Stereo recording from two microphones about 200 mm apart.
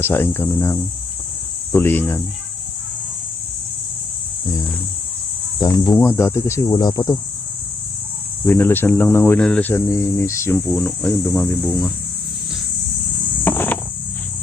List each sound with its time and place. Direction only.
0.0 s speech: 10° left (ahead or behind)
5.6 s speech: 15° left (ahead or behind)
8.4 s speech: 10° left (ahead or behind)
13.4 s cricket: 10° left (ahead or behind)